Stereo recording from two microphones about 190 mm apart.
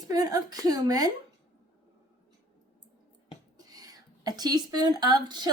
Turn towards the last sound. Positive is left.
turn(degrees=-20)  # may be behind; listen again after turning